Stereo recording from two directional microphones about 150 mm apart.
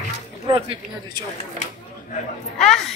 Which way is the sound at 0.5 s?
35° right (ahead or behind).